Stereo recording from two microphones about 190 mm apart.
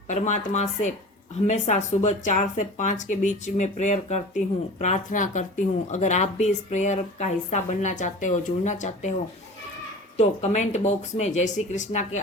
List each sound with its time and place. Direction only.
0.1 s speech: 40° left (ahead or behind)
10.2 s speech: 35° left (ahead or behind)